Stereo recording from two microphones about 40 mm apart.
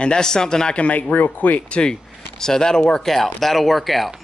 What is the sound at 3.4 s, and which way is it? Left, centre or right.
Speech, centre.